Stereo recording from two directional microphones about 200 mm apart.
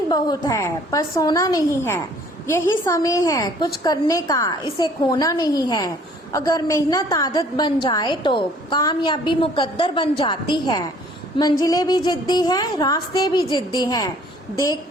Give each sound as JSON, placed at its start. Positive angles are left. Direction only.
{"t": 0.1, "sound": "a woman's voice", "side_deg": 20}